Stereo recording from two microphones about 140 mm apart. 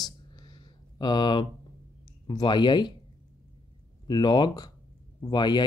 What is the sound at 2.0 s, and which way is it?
Speech, 35° left (ahead or behind).